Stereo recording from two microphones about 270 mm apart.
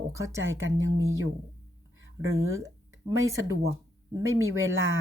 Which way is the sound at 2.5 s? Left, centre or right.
Centre.